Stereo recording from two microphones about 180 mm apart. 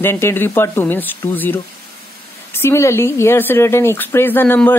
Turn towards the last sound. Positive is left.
turn(degrees=10)  # may be behind; listen again after turning